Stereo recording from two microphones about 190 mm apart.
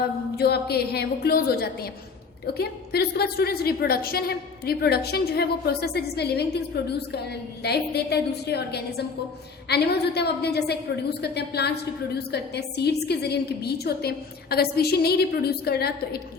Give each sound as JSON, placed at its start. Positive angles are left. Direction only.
{"t": 0.3, "sound": "a woman's voice", "side_deg": 55}